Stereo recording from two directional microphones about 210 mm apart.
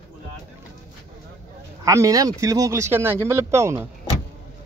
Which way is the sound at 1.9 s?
15° right (ahead or behind).